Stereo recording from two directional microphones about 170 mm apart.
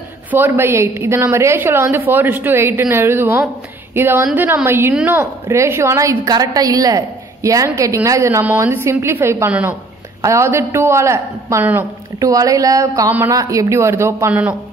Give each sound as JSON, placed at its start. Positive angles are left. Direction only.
{"t": 0.3, "sound": "a woman's voice", "side_deg": -10}